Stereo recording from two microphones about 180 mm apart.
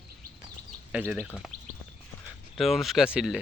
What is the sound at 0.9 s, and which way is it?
Speech, 5° right (ahead or behind).